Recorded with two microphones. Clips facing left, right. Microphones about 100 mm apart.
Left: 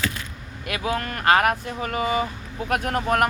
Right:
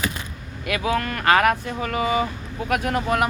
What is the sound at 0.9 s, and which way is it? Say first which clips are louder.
Speech: even; 35° left (ahead or behind).